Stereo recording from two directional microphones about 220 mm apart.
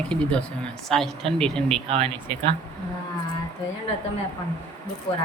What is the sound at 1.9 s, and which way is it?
Speech, 25° right (ahead or behind).